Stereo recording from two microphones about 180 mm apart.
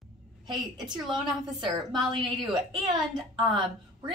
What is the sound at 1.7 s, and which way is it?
Speech, 25° right (ahead or behind).